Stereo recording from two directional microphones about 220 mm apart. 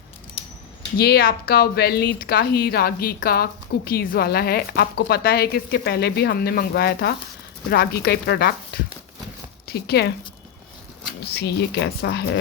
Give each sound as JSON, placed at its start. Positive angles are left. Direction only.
{"t": 0.9, "sound": "speech", "side_deg": 45}
{"t": 11.3, "sound": "speech", "side_deg": 50}